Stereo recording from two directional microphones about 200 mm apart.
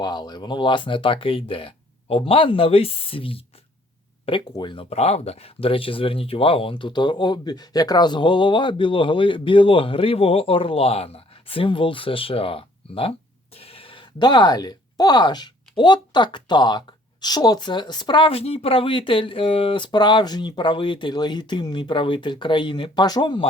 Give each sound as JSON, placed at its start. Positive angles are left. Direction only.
{"t": 0.0, "sound": "speech", "side_deg": 20}